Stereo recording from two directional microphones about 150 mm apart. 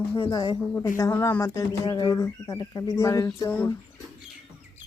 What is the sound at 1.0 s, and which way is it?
Speech, 20° left (ahead or behind).